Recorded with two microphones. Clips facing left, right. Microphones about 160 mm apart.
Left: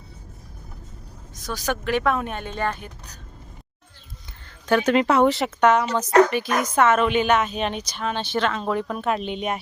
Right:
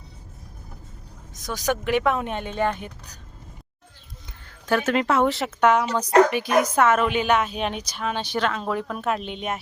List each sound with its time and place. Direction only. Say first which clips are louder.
1.3 s speech: right 2 dB; 20° right (ahead or behind)
4.6 s a woman's voice: left 3 dB; centre (ahead or behind)